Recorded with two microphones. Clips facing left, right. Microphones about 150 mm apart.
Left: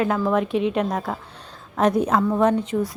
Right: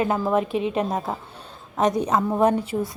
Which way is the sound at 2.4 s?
10° right (ahead or behind).